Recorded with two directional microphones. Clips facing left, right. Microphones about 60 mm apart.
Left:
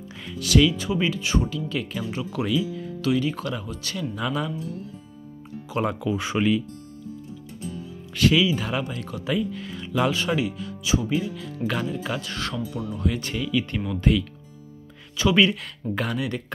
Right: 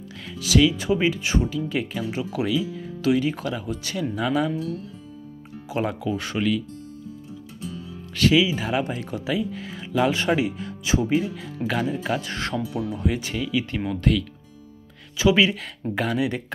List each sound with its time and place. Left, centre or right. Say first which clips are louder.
0.3 s speech: even; centre
0.7 s speech: right 3 dB; right
4.1 s speech: right 5 dB; centre
4.5 s speech: right 4 dB; right
5.8 s speech: left 1 dB; centre
6.3 s speech: left 2 dB; centre
8.1 s speech: right 1 dB; centre
8.8 s speech: right 3 dB; right
9.2 s speech: left 2 dB; centre
10.1 s speech: right 2 dB; right
11.3 s speech: right 1 dB; centre
13.2 s speech: even; centre
15.1 s speech: right 1 dB; centre
16.2 s speech: right 4 dB; centre